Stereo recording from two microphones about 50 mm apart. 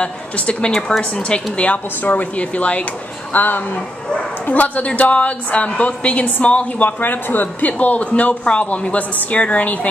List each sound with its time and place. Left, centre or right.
0.0 s a woman's voice: left
3.3 s a woman's voice: left
7.0 s speech: left